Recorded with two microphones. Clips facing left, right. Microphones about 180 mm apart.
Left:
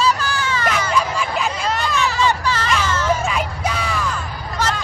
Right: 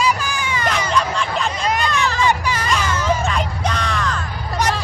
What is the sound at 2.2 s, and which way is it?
Hubbub, 15° right (ahead or behind).